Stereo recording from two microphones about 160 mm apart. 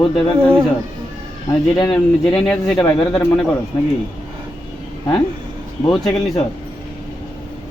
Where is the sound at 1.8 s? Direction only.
10° left (ahead or behind).